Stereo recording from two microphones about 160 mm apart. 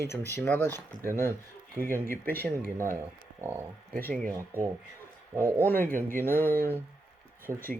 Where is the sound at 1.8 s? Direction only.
15° left (ahead or behind).